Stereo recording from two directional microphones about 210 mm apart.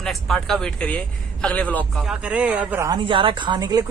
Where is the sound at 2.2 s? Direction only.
5° right (ahead or behind).